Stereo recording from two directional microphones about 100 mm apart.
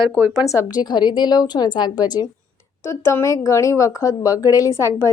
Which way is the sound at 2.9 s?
25° left (ahead or behind).